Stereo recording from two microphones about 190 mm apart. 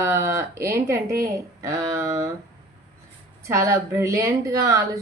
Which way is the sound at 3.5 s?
15° right (ahead or behind).